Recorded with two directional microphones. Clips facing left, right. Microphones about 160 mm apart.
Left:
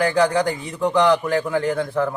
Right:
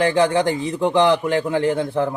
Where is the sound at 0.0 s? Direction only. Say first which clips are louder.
Right 1 dB; 25° right (ahead or behind).